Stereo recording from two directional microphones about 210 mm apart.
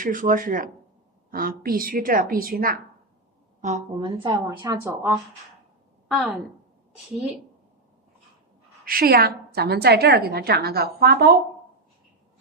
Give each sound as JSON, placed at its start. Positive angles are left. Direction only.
{"t": 0.0, "sound": "a woman's voice", "side_deg": -40}
{"t": 4.0, "sound": "a woman's voice", "side_deg": -20}
{"t": 6.1, "sound": "a woman's voice", "side_deg": 0}
{"t": 8.8, "sound": "a woman's voice", "side_deg": -45}